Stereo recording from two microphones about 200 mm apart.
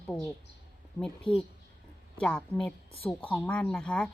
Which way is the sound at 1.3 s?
25° left (ahead or behind).